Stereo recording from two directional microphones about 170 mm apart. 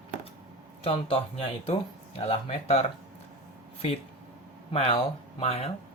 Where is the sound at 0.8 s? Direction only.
35° left (ahead or behind).